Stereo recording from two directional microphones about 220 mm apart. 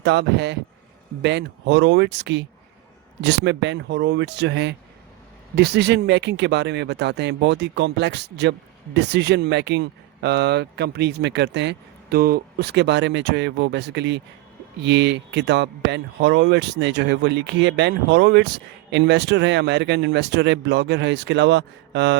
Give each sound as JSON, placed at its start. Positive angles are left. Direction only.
{"t": 0.0, "sound": "speech", "side_deg": -50}